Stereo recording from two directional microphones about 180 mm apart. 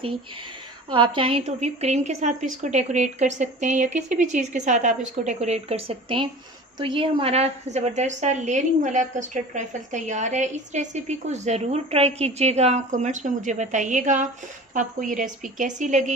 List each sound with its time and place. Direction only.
0.9 s a woman's voice: 30° right (ahead or behind)